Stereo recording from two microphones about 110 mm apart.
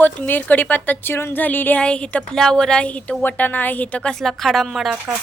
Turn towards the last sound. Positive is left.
turn(degrees=-5)  # may be behind; listen again after turning